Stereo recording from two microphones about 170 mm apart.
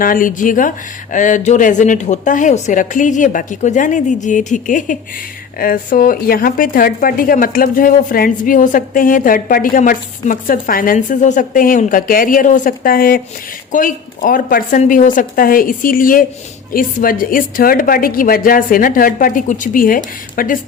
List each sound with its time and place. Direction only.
0.0 s a woman's voice: 55° left (ahead or behind)